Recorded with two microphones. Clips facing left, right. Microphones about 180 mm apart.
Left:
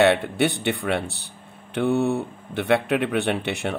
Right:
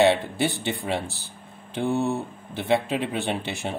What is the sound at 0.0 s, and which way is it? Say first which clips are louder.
Speech: left 2 dB; 65° left (ahead or behind).